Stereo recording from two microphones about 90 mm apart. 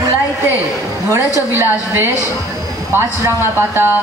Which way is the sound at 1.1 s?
25° right (ahead or behind).